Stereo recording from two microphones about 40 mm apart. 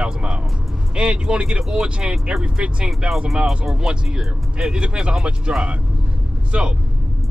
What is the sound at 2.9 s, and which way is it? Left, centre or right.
Speech, centre.